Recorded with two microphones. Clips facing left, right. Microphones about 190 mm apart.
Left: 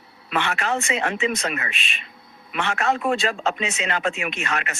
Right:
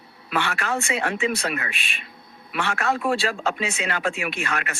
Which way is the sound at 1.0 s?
60° right (ahead or behind).